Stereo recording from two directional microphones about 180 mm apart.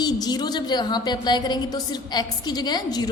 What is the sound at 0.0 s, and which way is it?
A woman's voice, 25° left (ahead or behind).